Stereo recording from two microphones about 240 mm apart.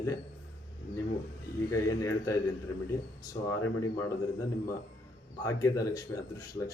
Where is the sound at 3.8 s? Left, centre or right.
Centre.